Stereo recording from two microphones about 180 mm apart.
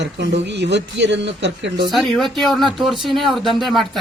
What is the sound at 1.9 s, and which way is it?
Speech, centre (ahead or behind).